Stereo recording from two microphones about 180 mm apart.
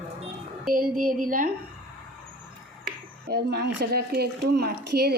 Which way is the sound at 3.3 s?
65° right (ahead or behind).